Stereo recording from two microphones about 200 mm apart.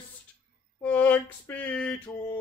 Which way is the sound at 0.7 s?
10° left (ahead or behind).